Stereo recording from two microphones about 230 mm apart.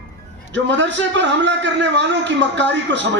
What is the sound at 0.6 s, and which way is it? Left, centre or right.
A man's voice, right.